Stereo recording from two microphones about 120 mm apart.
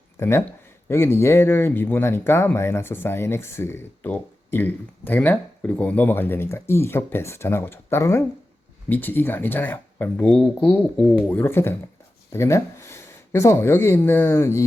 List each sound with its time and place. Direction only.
0.2 s speech: 20° left (ahead or behind)